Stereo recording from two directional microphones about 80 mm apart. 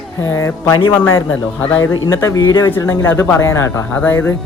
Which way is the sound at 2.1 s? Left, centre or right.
Left.